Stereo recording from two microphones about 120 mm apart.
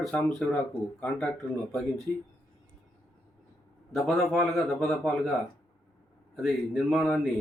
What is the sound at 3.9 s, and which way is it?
Speech, centre (ahead or behind).